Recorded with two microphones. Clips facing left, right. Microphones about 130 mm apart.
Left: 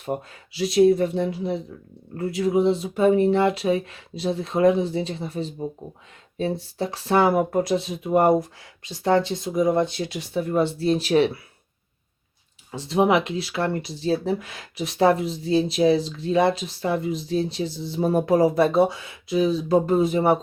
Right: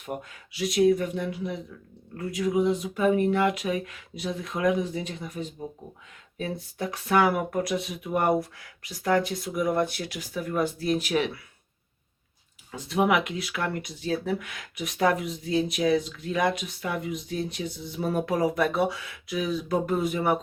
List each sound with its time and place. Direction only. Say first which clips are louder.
0.0 s speech: left 6 dB; 35° left (ahead or behind)
12.7 s speech: left 4 dB; 30° left (ahead or behind)